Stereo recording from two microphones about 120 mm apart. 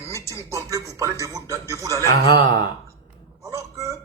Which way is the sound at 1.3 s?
25° right (ahead or behind).